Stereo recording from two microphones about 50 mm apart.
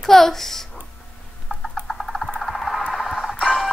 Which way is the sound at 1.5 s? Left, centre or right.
Left.